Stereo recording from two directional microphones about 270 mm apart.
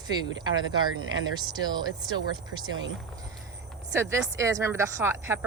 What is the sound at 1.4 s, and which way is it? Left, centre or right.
Speech, centre.